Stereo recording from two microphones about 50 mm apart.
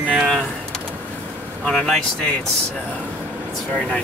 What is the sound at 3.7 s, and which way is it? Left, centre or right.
Speech, centre.